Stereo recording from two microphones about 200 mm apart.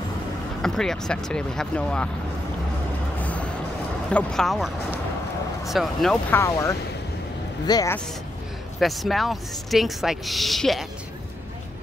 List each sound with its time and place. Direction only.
0.6 s speech: centre (ahead or behind)
3.2 s vehicle: 5° left (ahead or behind)
4.1 s speech: 5° left (ahead or behind)
6.3 s speech: 15° left (ahead or behind)
8.7 s speech: centre (ahead or behind)